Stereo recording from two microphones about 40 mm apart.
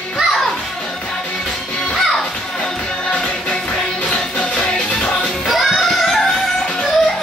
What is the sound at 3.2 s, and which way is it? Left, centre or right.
Music, centre.